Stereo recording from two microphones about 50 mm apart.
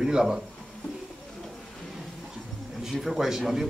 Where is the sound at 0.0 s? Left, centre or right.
Centre.